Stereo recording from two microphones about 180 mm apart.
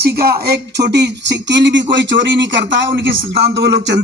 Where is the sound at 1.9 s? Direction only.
90° right.